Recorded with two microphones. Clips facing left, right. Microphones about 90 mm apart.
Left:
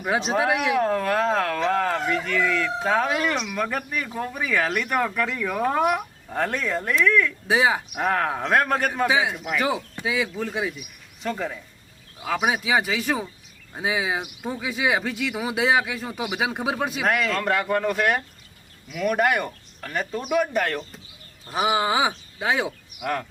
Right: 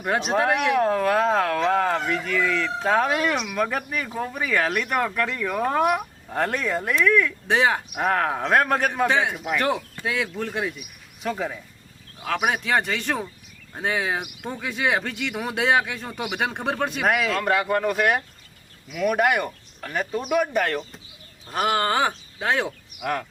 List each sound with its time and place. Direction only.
0.0 s speech: centre (ahead or behind)